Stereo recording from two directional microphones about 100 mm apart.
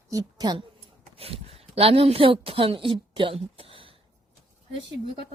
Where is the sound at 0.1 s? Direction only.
40° right (ahead or behind).